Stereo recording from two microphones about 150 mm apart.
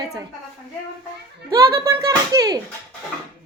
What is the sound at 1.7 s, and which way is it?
Speech, 20° right (ahead or behind).